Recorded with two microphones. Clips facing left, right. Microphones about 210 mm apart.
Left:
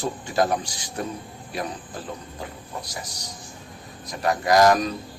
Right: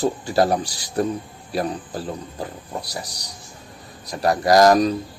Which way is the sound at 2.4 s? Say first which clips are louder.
Right 5 dB; 35° right (ahead or behind).